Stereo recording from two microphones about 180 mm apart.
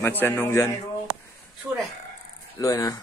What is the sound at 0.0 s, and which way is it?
Speech, 10° left (ahead or behind).